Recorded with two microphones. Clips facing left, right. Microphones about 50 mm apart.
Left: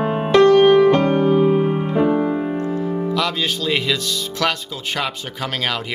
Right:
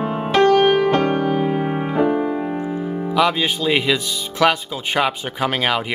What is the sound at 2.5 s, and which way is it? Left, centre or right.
Piano, centre.